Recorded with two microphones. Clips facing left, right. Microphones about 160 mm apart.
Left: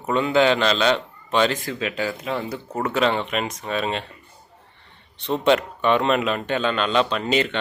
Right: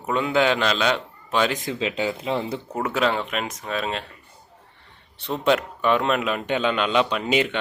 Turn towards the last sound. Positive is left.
turn(degrees=-10)  # may be behind; listen again after turning